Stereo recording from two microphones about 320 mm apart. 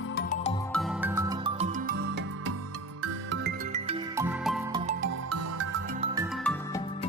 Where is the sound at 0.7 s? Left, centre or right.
Centre; by 3.5 s right.